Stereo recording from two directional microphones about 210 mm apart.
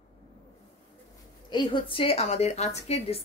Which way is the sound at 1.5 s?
25° left (ahead or behind).